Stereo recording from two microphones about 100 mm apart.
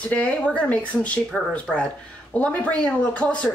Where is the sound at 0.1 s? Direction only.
15° left (ahead or behind).